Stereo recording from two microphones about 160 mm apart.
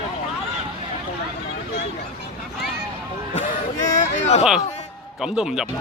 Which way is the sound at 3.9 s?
45° left (ahead or behind).